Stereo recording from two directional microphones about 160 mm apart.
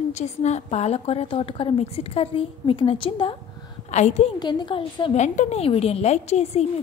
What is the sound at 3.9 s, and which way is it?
Speech, 45° left (ahead or behind).